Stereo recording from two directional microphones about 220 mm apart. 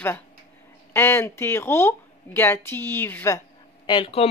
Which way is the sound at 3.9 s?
25° left (ahead or behind).